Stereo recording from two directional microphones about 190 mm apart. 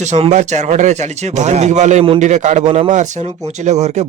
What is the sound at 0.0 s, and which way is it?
Speech, 35° right (ahead or behind).